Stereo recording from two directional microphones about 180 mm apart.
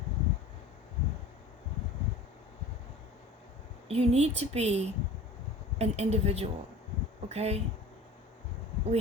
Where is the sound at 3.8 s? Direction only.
35° right (ahead or behind).